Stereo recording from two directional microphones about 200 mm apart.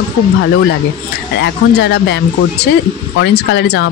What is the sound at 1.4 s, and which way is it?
Speech, 60° left (ahead or behind).